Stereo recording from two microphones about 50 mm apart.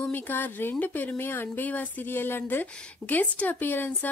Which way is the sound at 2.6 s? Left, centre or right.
Left.